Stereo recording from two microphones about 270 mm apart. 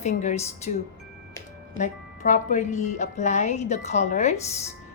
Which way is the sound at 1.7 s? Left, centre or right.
Left.